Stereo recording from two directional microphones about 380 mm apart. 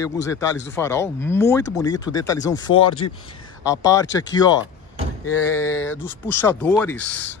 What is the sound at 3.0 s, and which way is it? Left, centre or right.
Speech, left.